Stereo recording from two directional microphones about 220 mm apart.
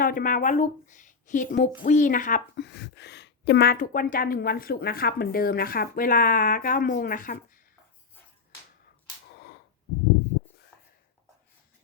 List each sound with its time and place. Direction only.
0.0 s a woman's voice: 40° left (ahead or behind)
2.6 s a woman's voice: 50° left (ahead or behind)
10.7 s a sound: 10° left (ahead or behind)